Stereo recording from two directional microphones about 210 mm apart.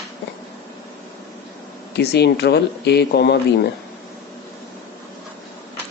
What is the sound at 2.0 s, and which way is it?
Speech, 50° left (ahead or behind).